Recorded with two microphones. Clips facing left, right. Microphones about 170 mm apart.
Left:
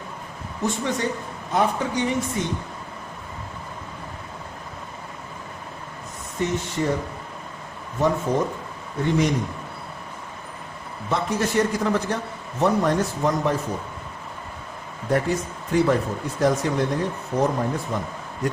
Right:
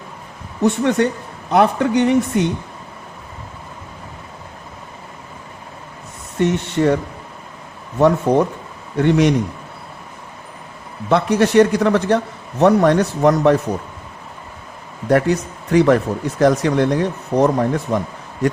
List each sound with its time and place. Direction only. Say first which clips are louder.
0.6 s speech: right 9 dB; 65° right (ahead or behind)
6.4 s speech: right 8 dB; 70° right (ahead or behind)
11.1 s speech: right 9 dB; 75° right (ahead or behind)
15.1 s speech: right 7 dB; 75° right (ahead or behind)